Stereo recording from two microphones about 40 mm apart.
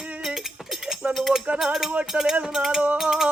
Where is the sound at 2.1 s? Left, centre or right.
Right.